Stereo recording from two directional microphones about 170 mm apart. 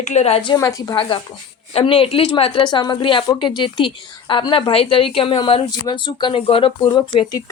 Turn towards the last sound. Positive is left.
turn(degrees=25)  # may be behind; listen again after turning